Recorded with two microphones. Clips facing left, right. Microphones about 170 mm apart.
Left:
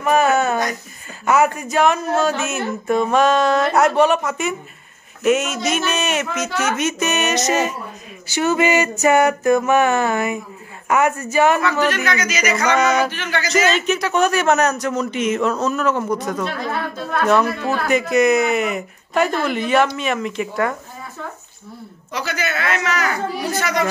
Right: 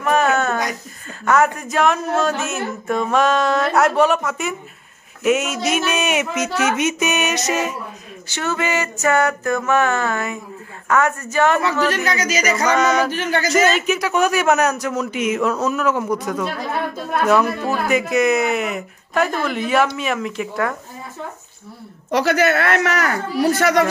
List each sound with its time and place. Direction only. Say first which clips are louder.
0.0 s a sound: left 1 dB; 5° left (ahead or behind)
1.2 s a man's voice: even; 5° left (ahead or behind)
8.3 s a sound: left 5 dB; 15° left (ahead or behind)
11.9 s speech: right 1 dB; 35° right (ahead or behind)
13.1 s music: right 4 dB; 45° right (ahead or behind)
13.7 s a man's voice: even; 5° right (ahead or behind)
22.1 s speech: right 8 dB; 65° right (ahead or behind)